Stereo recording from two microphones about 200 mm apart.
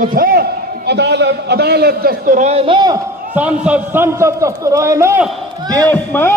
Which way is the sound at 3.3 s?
5° right (ahead or behind).